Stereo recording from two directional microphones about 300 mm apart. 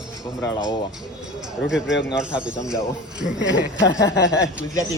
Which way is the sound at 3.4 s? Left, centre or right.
Left.